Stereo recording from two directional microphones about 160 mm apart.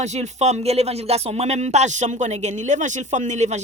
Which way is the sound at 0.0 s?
45° right (ahead or behind).